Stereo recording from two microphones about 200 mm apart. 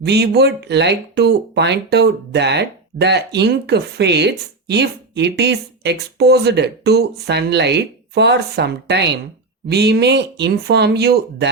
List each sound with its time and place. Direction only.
0.0 s speech: 55° right (ahead or behind)